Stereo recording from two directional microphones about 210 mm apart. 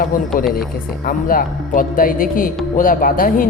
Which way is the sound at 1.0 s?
40° left (ahead or behind).